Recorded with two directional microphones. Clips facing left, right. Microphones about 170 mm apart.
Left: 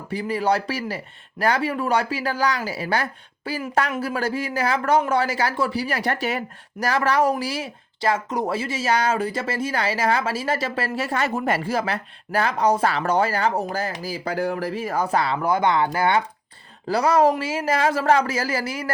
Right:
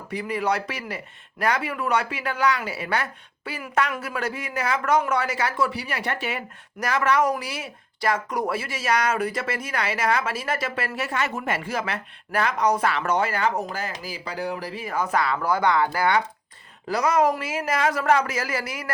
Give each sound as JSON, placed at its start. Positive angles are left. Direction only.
{"t": 0.1, "sound": "speech", "side_deg": 30}